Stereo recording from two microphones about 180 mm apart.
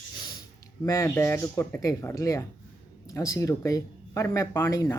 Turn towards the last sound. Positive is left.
turn(degrees=20)  # may be behind; listen again after turning